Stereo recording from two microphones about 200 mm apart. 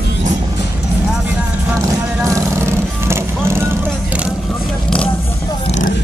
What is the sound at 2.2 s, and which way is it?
Vehicle, 15° right (ahead or behind).